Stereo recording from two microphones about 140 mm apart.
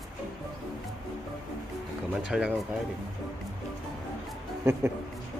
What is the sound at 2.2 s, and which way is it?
Speech, 5° right (ahead or behind).